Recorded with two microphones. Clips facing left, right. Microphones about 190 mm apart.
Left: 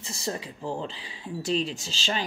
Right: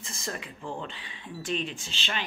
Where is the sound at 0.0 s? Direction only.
35° left (ahead or behind).